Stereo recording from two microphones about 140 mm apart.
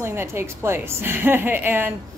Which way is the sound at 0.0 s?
15° right (ahead or behind).